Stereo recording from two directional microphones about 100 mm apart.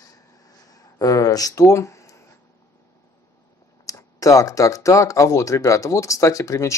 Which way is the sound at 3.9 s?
35° left (ahead or behind).